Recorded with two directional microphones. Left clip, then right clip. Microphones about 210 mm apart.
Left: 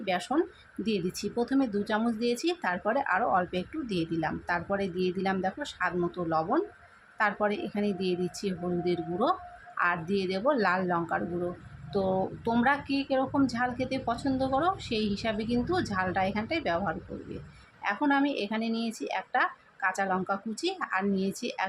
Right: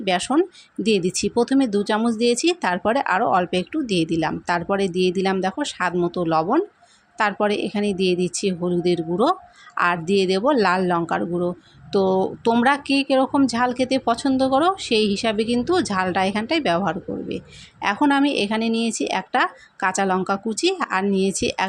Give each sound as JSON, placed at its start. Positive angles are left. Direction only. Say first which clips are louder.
{"t": 0.0, "sound": "speech", "louder": "right 9 dB", "side_deg": -35}